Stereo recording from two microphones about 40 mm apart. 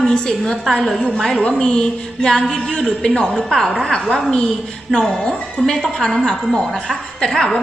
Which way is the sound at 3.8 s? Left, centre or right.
Centre.